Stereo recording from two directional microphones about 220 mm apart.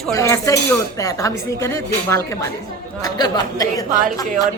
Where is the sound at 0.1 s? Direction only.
15° left (ahead or behind).